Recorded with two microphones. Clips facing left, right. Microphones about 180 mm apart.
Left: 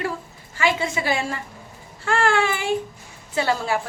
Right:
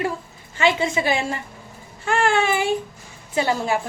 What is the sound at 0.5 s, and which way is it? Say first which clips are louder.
Speech: right 3 dB; 20° right (ahead or behind).